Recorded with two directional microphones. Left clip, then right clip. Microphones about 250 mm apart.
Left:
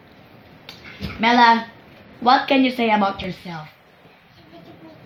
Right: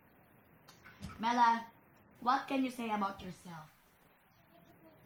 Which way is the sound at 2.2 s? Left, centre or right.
Centre.